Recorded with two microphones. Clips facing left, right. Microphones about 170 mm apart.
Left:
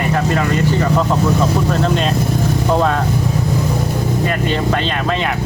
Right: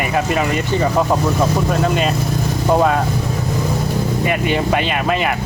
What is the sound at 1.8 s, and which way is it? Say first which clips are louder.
Speech: even; 5° right (ahead or behind).